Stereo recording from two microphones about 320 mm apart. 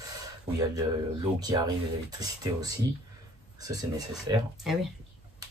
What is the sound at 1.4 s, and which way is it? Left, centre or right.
Speech, centre.